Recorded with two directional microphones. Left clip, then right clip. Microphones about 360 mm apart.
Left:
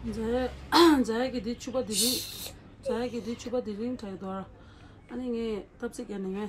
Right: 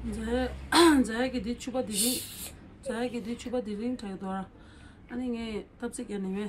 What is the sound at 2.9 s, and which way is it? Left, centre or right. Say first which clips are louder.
Speech: left 2 dB; centre.